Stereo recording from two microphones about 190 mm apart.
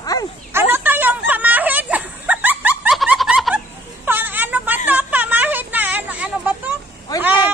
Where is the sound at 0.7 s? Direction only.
10° right (ahead or behind).